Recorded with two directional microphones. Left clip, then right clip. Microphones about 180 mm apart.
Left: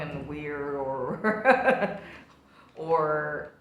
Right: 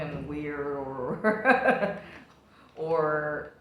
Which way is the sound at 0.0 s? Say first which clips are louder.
Right 1 dB; 20° left (ahead or behind).